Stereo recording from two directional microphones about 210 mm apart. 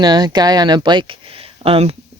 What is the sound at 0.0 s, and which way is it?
Speech, 20° right (ahead or behind).